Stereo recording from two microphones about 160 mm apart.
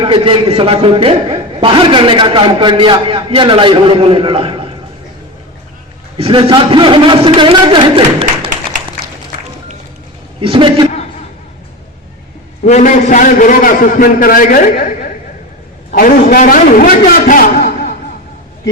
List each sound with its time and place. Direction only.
0.0 s a man's voice: 35° right (ahead or behind)
6.1 s a man's voice: 35° right (ahead or behind)
10.4 s a man's voice: 35° right (ahead or behind)
12.6 s a man's voice: 50° left (ahead or behind); by 17.9 s 65° left (ahead or behind)